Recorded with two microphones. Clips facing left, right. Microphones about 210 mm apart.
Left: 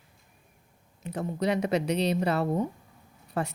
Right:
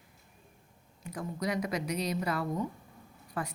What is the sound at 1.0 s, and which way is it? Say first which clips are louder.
Speech: left 6 dB; 30° left (ahead or behind).